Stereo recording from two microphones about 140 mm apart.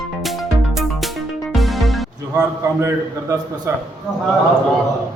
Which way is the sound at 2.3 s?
15° right (ahead or behind).